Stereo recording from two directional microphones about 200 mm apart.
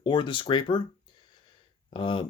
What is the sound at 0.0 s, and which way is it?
Speech, 25° left (ahead or behind).